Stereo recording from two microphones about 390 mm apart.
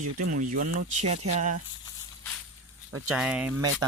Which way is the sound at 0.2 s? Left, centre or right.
Right.